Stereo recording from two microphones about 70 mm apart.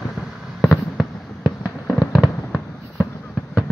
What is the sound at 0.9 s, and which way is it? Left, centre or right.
Fireworks, centre.